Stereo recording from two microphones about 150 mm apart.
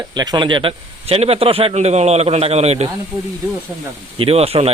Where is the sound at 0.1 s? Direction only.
30° right (ahead or behind); by 2.9 s 45° right (ahead or behind).